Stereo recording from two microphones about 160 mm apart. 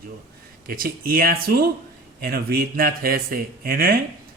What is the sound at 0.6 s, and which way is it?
Speech, 65° right (ahead or behind).